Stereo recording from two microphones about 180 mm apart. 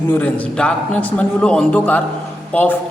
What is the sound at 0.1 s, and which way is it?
A man's voice, 10° left (ahead or behind).